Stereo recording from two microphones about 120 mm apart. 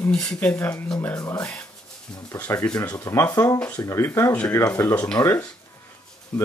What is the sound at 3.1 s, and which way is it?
Speech, 25° left (ahead or behind).